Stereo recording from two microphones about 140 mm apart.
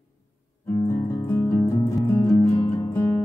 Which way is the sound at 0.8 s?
20° left (ahead or behind).